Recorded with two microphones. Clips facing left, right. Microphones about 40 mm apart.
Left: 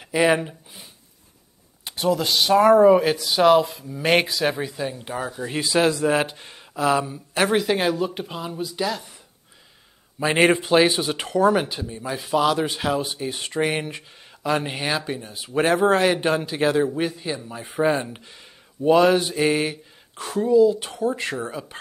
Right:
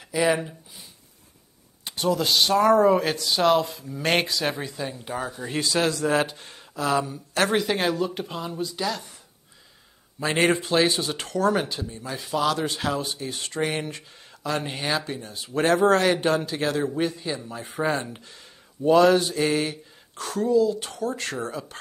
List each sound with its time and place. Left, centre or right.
0.0 s speech: left
1.9 s speech: centre
10.2 s speech: centre